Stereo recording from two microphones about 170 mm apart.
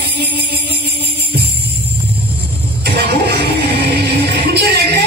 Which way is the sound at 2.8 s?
70° right (ahead or behind).